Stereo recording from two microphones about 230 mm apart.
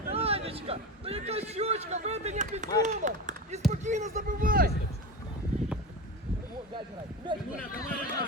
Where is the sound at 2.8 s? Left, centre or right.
Right.